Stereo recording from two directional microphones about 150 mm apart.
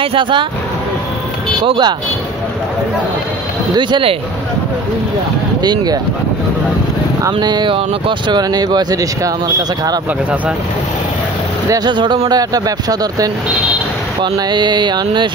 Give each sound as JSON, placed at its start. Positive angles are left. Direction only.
{"t": 0.0, "sound": "speech", "side_deg": -35}
{"t": 1.6, "sound": "speech", "side_deg": -30}
{"t": 3.7, "sound": "speech", "side_deg": -35}
{"t": 5.6, "sound": "speech", "side_deg": -25}
{"t": 7.3, "sound": "speech", "side_deg": -30}
{"t": 11.7, "sound": "speech", "side_deg": -30}